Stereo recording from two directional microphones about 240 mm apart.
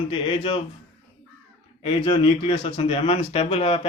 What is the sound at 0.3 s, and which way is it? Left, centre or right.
Speech, left.